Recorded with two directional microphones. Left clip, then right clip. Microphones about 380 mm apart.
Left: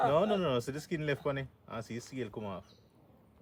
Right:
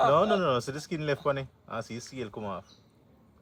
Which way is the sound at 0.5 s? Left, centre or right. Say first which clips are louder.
Right 4 dB; centre.